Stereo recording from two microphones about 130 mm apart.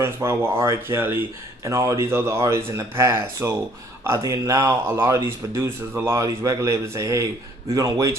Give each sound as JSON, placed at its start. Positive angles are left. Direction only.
{"t": 0.0, "sound": "speech", "side_deg": -20}